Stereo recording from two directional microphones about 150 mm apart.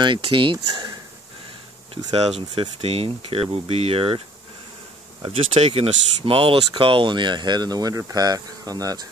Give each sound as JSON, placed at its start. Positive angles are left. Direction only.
{"t": 0.0, "sound": "speech", "side_deg": -35}
{"t": 2.1, "sound": "speech", "side_deg": -45}
{"t": 5.7, "sound": "speech", "side_deg": -35}
{"t": 8.1, "sound": "cricket", "side_deg": -25}